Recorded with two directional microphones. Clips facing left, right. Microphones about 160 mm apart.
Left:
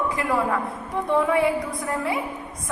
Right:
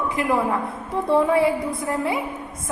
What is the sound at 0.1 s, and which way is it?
Speech, 20° right (ahead or behind).